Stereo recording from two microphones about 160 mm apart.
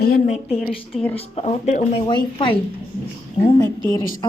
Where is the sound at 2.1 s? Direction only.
30° left (ahead or behind).